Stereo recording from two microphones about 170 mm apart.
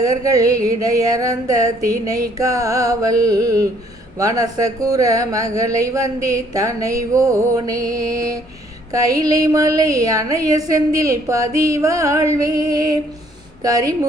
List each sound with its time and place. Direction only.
0.0 s speech: 20° right (ahead or behind)